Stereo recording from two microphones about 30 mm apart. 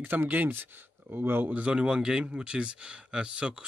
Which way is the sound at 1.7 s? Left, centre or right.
Right.